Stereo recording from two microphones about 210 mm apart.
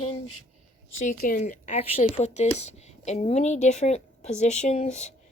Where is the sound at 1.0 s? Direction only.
40° left (ahead or behind).